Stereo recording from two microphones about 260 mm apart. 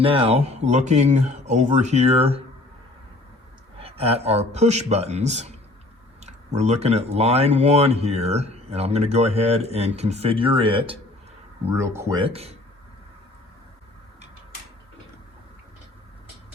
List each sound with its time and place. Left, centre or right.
0.0 s speech: right
3.8 s speech: right